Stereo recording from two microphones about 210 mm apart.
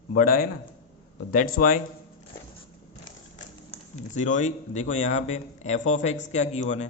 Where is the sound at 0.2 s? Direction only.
40° left (ahead or behind).